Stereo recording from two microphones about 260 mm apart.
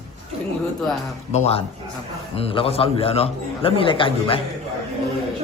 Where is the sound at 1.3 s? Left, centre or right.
Left.